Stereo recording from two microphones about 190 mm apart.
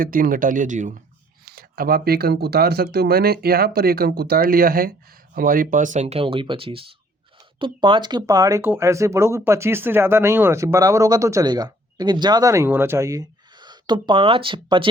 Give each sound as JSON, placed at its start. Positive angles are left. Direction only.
{"t": 0.0, "sound": "speech", "side_deg": -45}
{"t": 1.5, "sound": "speech", "side_deg": -50}